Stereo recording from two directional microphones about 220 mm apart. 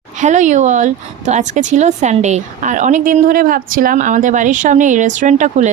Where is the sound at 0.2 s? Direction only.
35° right (ahead or behind).